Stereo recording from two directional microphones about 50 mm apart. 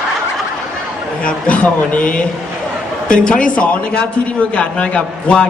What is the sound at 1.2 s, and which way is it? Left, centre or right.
A man's voice, left.